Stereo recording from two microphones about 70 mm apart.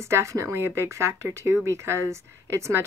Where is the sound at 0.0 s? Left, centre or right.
Right.